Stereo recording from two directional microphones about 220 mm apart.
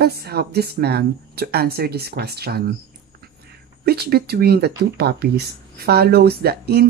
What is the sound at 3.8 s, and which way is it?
Speech, 45° right (ahead or behind).